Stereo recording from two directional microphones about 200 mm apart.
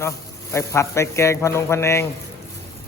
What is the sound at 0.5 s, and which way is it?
A man's voice, 15° left (ahead or behind).